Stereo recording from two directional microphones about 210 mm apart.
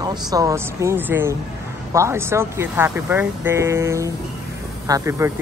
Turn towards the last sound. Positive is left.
turn(degrees=-15)  # may be behind; listen again after turning